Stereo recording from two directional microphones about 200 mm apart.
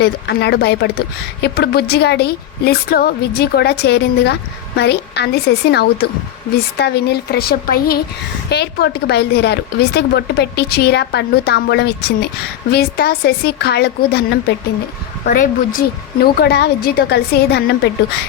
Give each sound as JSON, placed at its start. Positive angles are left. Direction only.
{"t": 0.0, "sound": "a woman's voice", "side_deg": 55}
{"t": 15.3, "sound": "speech", "side_deg": 45}
{"t": 16.2, "sound": "a woman's voice", "side_deg": 55}